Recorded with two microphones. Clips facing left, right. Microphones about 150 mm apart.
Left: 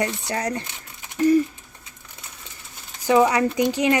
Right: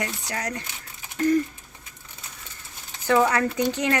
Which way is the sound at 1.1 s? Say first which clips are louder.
Left 4 dB; 10° left (ahead or behind).